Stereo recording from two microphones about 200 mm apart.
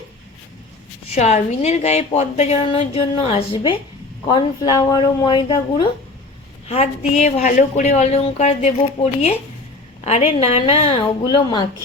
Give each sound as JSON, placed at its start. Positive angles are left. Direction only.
{"t": 1.1, "sound": "speech", "side_deg": 35}
{"t": 6.7, "sound": "speech", "side_deg": 35}